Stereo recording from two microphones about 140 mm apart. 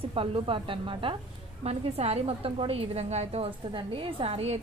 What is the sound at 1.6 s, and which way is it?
A woman's voice, 50° right (ahead or behind).